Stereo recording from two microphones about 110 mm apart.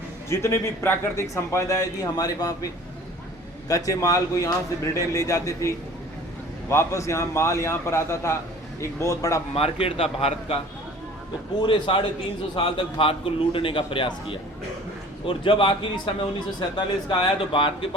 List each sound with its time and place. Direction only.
0.3 s a man's voice: 25° left (ahead or behind)
3.7 s a man's voice: 35° left (ahead or behind)
9.6 s a man's voice: 65° left (ahead or behind)
11.6 s a man's voice: 50° left (ahead or behind)